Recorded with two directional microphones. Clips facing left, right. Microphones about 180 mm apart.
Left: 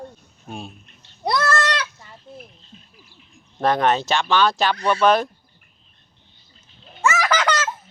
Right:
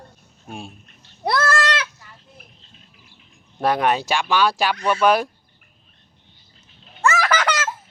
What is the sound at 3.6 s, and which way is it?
Speech, 10° right (ahead or behind).